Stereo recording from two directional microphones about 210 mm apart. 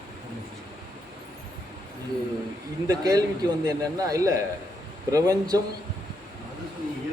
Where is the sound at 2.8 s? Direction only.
20° right (ahead or behind).